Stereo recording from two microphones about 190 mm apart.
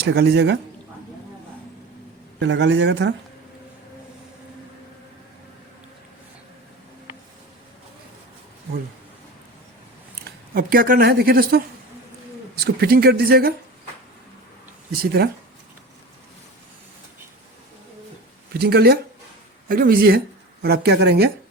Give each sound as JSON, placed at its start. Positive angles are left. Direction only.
{"t": 0.0, "sound": "speech", "side_deg": -60}
{"t": 2.4, "sound": "speech", "side_deg": -70}
{"t": 10.2, "sound": "speech", "side_deg": -50}
{"t": 15.0, "sound": "speech", "side_deg": -55}
{"t": 18.6, "sound": "speech", "side_deg": -55}